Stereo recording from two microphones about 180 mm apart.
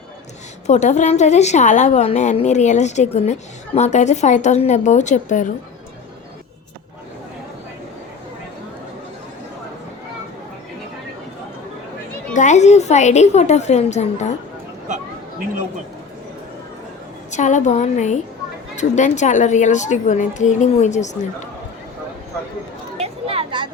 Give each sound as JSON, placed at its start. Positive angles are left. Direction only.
{"t": 0.7, "sound": "a woman's voice", "side_deg": 40}
{"t": 12.3, "sound": "a woman's voice", "side_deg": 45}
{"t": 17.3, "sound": "a woman's voice", "side_deg": 40}
{"t": 23.0, "sound": "a sound", "side_deg": -35}